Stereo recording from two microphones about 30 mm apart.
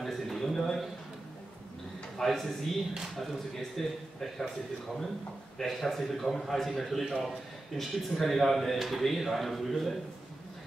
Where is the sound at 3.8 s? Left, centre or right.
Centre.